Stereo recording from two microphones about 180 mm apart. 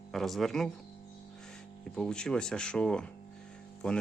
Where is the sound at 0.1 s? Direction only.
Centre (ahead or behind).